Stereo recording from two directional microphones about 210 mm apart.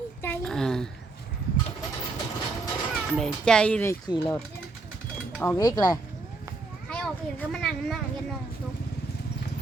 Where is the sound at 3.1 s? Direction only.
Centre (ahead or behind).